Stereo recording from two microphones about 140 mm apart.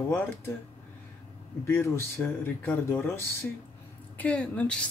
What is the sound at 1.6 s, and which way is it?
Speech, 15° left (ahead or behind).